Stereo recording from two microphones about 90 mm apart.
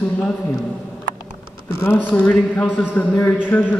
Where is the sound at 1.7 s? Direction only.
30° left (ahead or behind).